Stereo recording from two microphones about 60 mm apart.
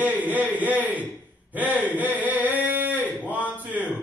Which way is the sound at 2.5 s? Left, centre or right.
Right.